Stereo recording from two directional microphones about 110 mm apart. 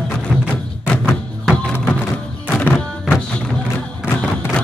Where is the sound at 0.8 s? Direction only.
15° left (ahead or behind).